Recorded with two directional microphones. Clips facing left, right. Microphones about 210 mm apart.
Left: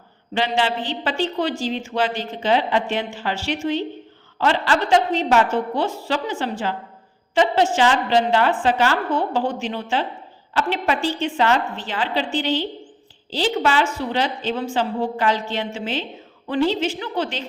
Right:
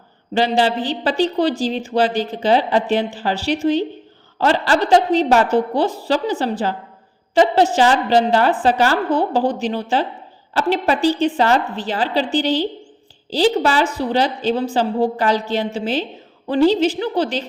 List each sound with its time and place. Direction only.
0.3 s speech: 35° right (ahead or behind)